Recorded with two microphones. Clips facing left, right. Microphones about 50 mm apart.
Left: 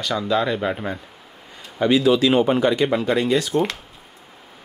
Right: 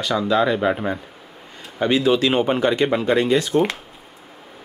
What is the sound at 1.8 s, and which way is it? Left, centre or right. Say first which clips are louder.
Speech: left 1 dB; right.